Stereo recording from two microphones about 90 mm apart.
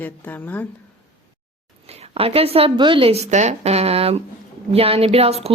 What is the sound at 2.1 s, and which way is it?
Speech, 90° right.